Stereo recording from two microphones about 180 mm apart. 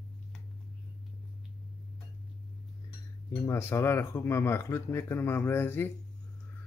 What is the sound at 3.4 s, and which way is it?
Speech, 15° left (ahead or behind).